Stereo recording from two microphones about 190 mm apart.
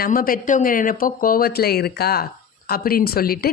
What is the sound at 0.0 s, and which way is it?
Speech, 50° left (ahead or behind).